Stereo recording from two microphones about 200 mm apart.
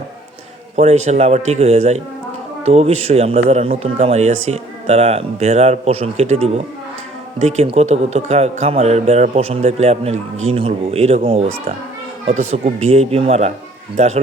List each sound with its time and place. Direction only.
0.8 s a man's voice: 35° right (ahead or behind)
12.5 s a man's voice: 35° right (ahead or behind)